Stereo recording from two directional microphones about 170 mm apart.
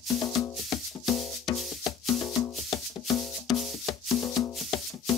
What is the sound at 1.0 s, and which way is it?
Music, centre (ahead or behind).